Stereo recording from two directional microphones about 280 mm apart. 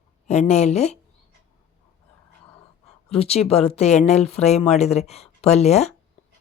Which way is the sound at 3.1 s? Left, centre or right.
Left.